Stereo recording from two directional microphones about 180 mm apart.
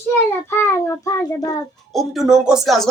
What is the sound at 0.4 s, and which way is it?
A child's voice, 15° left (ahead or behind).